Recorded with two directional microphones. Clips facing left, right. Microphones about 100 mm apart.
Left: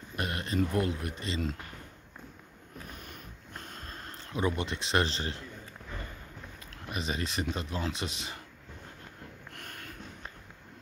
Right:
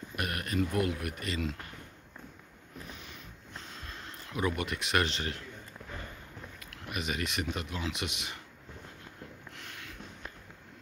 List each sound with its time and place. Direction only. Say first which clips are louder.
0.1 s speech: left 1 dB; 25° left (ahead or behind)
2.9 s sniff: left 1 dB; 50° left (ahead or behind)
4.3 s speech: left 1 dB; 30° left (ahead or behind)
6.7 s speech: left 1 dB; 30° left (ahead or behind)
9.5 s a sound: left 1 dB; 50° left (ahead or behind)